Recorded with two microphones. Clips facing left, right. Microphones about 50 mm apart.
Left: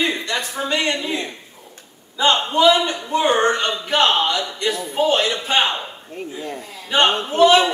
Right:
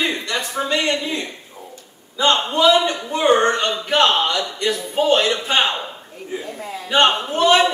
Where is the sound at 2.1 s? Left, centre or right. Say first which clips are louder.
Left 1 dB; centre.